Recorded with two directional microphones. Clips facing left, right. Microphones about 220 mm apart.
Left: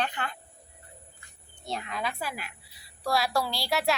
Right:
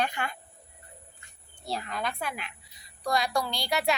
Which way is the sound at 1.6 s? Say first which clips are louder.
Right 1 dB; centre (ahead or behind).